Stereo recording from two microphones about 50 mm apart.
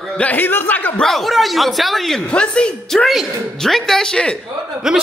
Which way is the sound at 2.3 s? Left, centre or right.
Left.